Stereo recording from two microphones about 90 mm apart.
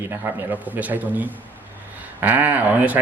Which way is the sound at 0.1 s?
20° right (ahead or behind).